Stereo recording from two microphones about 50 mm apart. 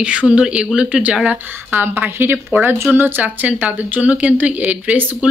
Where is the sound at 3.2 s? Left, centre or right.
Right.